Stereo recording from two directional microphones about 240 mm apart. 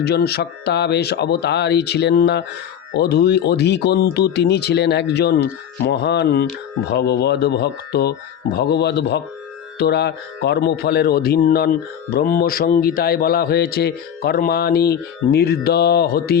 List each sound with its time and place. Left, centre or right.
0.0 s speech: left